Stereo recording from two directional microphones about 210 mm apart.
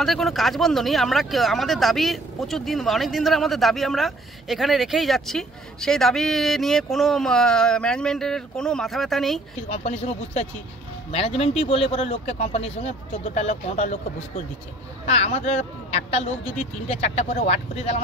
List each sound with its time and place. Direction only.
0.0 s speech: centre (ahead or behind)
9.6 s speech: 30° left (ahead or behind)